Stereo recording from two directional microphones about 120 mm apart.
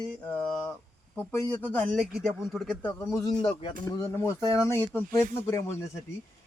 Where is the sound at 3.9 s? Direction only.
25° left (ahead or behind).